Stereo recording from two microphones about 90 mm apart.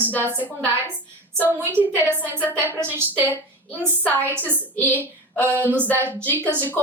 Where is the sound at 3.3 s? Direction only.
20° left (ahead or behind).